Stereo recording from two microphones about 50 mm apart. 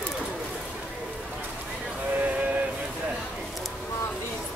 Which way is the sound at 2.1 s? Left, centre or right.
Right.